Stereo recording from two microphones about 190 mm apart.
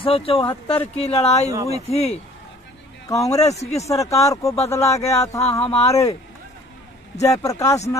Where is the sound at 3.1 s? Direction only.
15° left (ahead or behind).